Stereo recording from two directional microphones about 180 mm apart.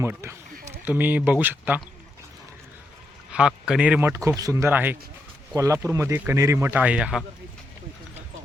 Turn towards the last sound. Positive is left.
turn(degrees=-5)  # may be behind; listen again after turning